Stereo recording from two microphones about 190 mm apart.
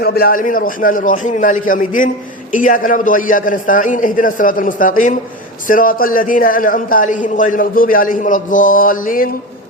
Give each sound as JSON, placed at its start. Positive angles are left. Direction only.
{"t": 0.0, "sound": "a man's voice", "side_deg": 55}